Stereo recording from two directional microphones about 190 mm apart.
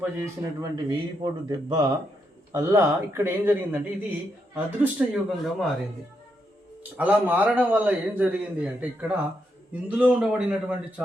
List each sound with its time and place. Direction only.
0.0 s a man's voice: 15° right (ahead or behind); by 5.7 s centre (ahead or behind)
6.9 s a man's voice: 10° right (ahead or behind)